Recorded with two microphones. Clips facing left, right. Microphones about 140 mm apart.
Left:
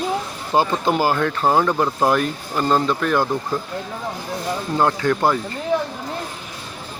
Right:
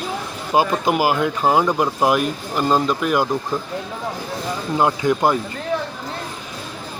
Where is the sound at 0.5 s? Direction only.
10° right (ahead or behind).